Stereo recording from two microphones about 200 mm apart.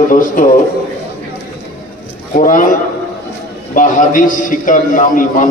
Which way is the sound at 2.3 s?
40° left (ahead or behind).